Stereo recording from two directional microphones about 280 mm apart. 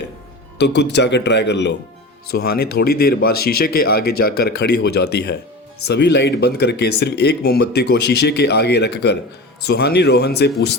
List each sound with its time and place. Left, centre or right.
0.6 s speech: left